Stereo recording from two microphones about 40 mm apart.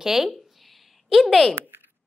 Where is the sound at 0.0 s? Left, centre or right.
Centre.